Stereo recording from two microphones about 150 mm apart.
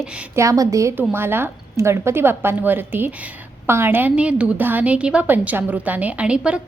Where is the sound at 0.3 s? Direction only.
20° right (ahead or behind).